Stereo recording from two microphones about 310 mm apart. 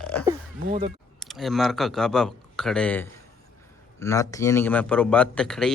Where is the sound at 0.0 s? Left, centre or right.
Centre.